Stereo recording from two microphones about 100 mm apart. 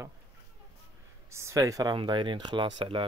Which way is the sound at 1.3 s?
30° right (ahead or behind).